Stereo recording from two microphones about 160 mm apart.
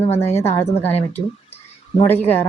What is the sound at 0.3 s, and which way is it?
Speech, 40° left (ahead or behind).